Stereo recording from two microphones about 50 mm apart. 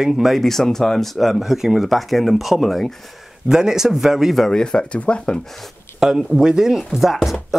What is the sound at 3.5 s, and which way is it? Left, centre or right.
Chopping, centre.